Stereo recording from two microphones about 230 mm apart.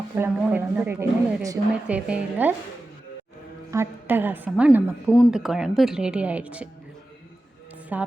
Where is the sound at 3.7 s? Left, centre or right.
Centre.